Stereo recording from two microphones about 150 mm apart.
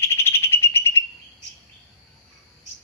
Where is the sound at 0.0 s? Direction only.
15° left (ahead or behind).